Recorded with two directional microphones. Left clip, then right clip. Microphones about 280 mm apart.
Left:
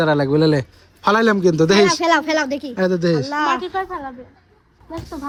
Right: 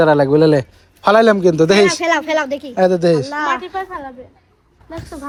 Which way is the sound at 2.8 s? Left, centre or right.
Centre.